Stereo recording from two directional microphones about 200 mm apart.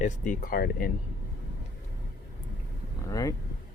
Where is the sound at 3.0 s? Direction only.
15° left (ahead or behind).